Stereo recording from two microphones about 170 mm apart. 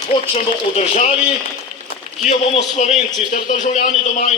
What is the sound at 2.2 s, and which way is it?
A man's voice, 40° left (ahead or behind).